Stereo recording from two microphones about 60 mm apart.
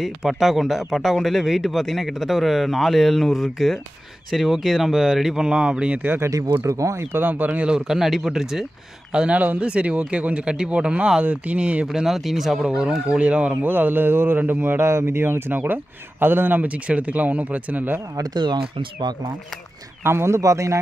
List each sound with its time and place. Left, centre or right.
0.0 s speech: centre
6.0 s speech: right
6.6 s speech: right
7.2 s speech: right
7.6 s speech: centre
9.4 s speech: right
11.9 s speech: centre
12.6 s speech: centre
13.6 s speech: right
20.0 s speech: right